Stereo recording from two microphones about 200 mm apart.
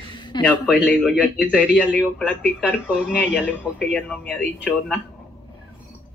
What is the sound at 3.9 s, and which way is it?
Speech, 5° left (ahead or behind).